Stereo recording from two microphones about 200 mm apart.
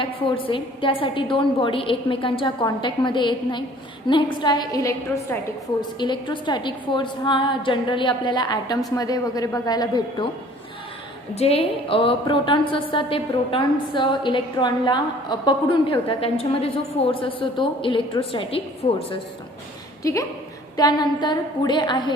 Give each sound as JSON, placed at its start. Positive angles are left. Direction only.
{"t": 0.0, "sound": "a woman's voice", "side_deg": 25}
{"t": 11.3, "sound": "a woman's voice", "side_deg": 30}
{"t": 20.0, "sound": "a woman's voice", "side_deg": 15}